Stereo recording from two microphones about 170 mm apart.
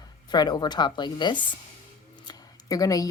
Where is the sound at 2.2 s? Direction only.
20° left (ahead or behind).